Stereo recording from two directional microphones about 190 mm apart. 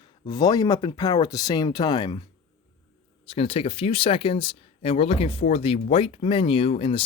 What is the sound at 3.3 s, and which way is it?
Speech, 30° left (ahead or behind).